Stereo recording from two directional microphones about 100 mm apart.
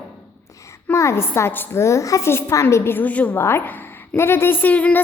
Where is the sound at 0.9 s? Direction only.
25° left (ahead or behind).